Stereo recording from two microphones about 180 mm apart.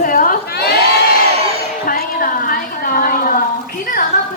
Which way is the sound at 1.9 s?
55° left (ahead or behind).